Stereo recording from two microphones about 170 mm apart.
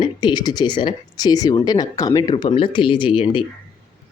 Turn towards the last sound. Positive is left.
turn(degrees=30)  # may be behind; listen again after turning